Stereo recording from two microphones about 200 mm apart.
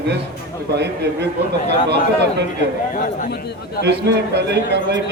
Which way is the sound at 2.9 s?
40° left (ahead or behind).